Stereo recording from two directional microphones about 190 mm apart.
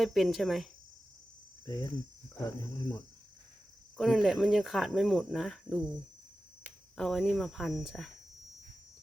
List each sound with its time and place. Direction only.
0.0 s speech: centre (ahead or behind)
1.6 s cricket: 20° left (ahead or behind)
3.9 s speech: centre (ahead or behind)